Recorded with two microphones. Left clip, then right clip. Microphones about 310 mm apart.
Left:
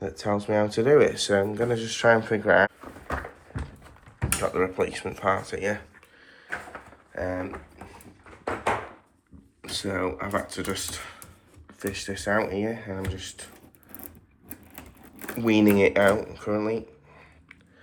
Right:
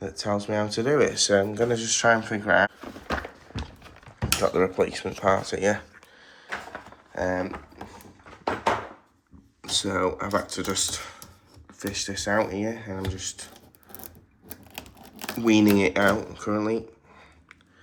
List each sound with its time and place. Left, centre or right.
0.0 s speech: centre
4.4 s speech: centre
7.2 s a sound: right
9.6 s speech: centre
15.4 s speech: centre